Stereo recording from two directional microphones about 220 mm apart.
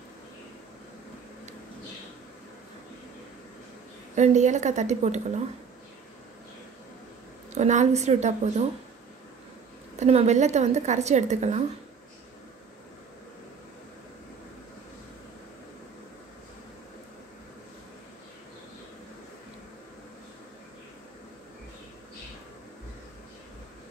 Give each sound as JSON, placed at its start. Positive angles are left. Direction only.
{"t": 4.1, "sound": "a woman's voice", "side_deg": -30}
{"t": 7.5, "sound": "a woman's voice", "side_deg": -30}
{"t": 9.9, "sound": "a woman's voice", "side_deg": -30}